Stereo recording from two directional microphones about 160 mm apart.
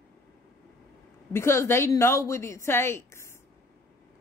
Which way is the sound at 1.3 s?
15° left (ahead or behind).